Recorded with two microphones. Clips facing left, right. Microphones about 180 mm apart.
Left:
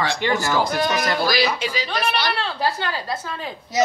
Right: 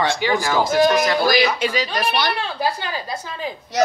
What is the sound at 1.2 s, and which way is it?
Speech, 50° right (ahead or behind).